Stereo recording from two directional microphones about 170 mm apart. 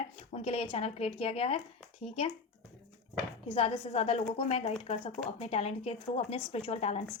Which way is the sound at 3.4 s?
35° left (ahead or behind).